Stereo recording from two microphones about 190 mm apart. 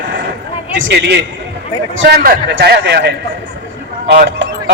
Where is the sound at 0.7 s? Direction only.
70° right (ahead or behind).